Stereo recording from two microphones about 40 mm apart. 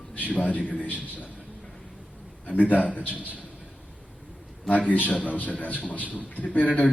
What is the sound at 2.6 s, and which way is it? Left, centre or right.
Speech, left.